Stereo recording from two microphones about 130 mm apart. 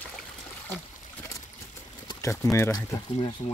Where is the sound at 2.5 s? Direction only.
20° left (ahead or behind).